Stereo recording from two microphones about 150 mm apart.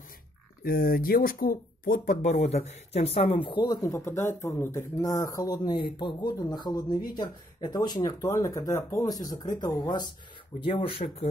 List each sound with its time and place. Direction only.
0.7 s speech: 75° left (ahead or behind); by 10.0 s 25° left (ahead or behind)
10.6 s speech: 40° left (ahead or behind)